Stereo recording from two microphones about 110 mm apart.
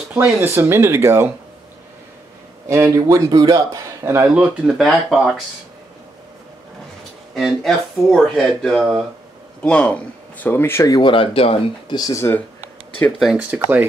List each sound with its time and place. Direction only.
0.1 s speech: 15° right (ahead or behind)
2.7 s a man's voice: 30° right (ahead or behind)
4.3 s speech: 10° right (ahead or behind)
7.3 s speech: centre (ahead or behind); by 11.0 s 25° left (ahead or behind)
11.0 s speech: 50° left (ahead or behind)
12.2 s speech: 20° left (ahead or behind)
13.2 s speech: 5° right (ahead or behind)
13.5 s speech: 15° right (ahead or behind)